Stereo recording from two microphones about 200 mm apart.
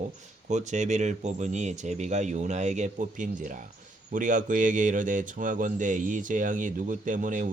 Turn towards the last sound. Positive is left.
turn(degrees=-40)  # may be behind; listen again after turning